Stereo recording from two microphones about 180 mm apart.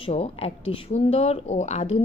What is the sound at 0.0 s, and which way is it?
A woman's voice, 35° left (ahead or behind).